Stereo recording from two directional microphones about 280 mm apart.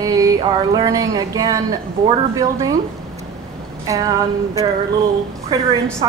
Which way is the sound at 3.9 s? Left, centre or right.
Centre.